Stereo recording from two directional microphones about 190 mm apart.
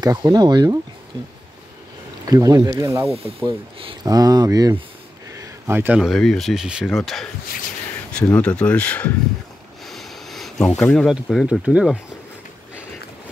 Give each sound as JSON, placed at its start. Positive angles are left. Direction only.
{"t": 0.0, "sound": "speech", "side_deg": -20}
{"t": 2.2, "sound": "speech", "side_deg": -20}
{"t": 8.3, "sound": "speech", "side_deg": 5}